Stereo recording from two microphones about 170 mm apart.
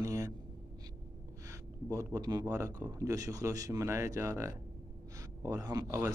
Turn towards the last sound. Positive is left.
turn(degrees=-20)  # may be behind; listen again after turning